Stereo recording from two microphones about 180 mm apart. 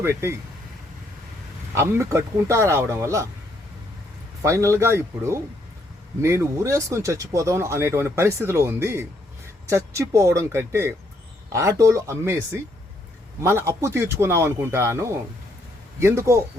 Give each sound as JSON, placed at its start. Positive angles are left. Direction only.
{"t": 0.0, "sound": "speech", "side_deg": -15}
{"t": 1.7, "sound": "speech", "side_deg": -15}
{"t": 4.4, "sound": "speech", "side_deg": -15}
{"t": 13.4, "sound": "speech", "side_deg": -15}